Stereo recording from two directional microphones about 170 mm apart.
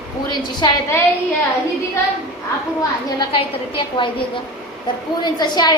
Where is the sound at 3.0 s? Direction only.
30° left (ahead or behind).